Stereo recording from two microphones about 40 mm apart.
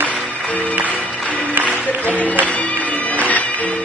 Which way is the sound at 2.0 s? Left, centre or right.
Left.